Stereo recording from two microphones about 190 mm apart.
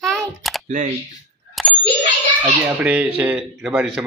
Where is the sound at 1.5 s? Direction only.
5° left (ahead or behind).